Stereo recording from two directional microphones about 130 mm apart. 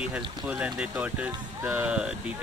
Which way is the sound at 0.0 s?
10° right (ahead or behind).